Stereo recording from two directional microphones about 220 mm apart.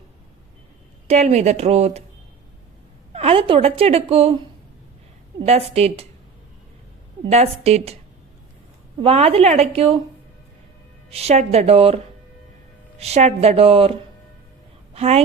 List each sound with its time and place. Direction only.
1.0 s a woman's voice: 30° right (ahead or behind)
3.1 s a woman's voice: 25° right (ahead or behind)
5.5 s a woman's voice: 30° right (ahead or behind)
7.3 s a woman's voice: 30° right (ahead or behind)
9.0 s a woman's voice: 25° right (ahead or behind)
11.1 s a woman's voice: 30° right (ahead or behind)
13.0 s a woman's voice: 30° right (ahead or behind)